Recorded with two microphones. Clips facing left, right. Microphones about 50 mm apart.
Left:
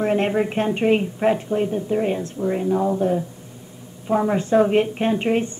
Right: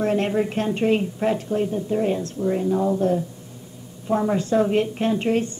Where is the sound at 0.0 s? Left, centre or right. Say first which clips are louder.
Left 1 dB; left.